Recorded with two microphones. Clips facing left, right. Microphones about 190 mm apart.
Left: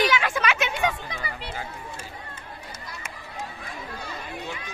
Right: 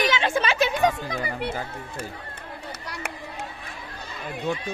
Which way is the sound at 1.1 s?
50° right (ahead or behind).